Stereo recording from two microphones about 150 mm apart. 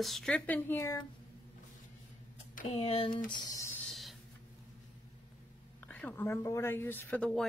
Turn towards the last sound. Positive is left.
turn(degrees=10)  # may be behind; listen again after turning